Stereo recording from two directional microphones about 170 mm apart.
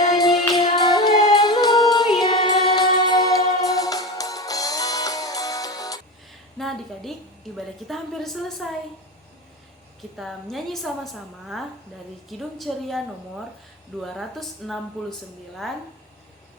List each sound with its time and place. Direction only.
0.1 s music: 25° left (ahead or behind)
6.6 s a woman's voice: centre (ahead or behind)
10.2 s a woman's voice: centre (ahead or behind)
14.0 s a woman's voice: centre (ahead or behind)